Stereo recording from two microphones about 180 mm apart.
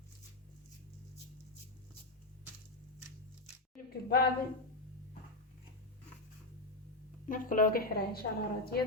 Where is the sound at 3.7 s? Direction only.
55° left (ahead or behind).